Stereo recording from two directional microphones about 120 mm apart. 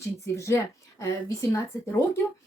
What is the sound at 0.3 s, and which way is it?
Speech, 25° left (ahead or behind).